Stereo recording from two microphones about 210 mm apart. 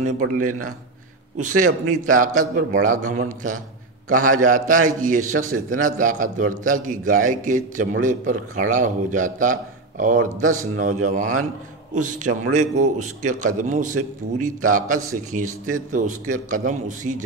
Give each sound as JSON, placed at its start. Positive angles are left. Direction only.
{"t": 1.4, "sound": "a man's voice", "side_deg": -35}